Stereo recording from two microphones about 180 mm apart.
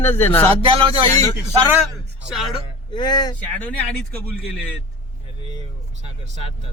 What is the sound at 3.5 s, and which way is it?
Speech, 10° left (ahead or behind).